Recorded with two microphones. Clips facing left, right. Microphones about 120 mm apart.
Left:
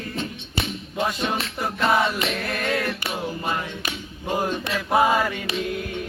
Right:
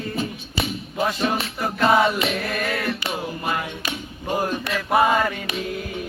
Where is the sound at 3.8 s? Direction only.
10° right (ahead or behind).